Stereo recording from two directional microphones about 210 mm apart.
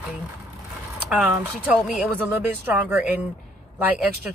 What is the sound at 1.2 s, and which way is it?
Speech, 10° right (ahead or behind).